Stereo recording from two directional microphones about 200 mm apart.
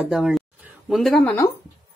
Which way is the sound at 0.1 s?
Centre (ahead or behind).